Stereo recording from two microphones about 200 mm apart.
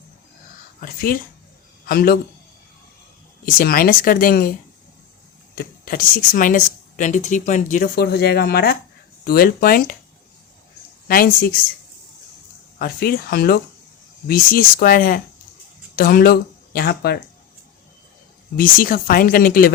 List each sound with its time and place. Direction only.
0.8 s a man's voice: 45° left (ahead or behind)
3.4 s speech: 45° left (ahead or behind)
5.5 s speech: 45° left (ahead or behind)
11.1 s speech: 45° left (ahead or behind)
12.8 s speech: 50° left (ahead or behind)
18.5 s speech: 45° left (ahead or behind)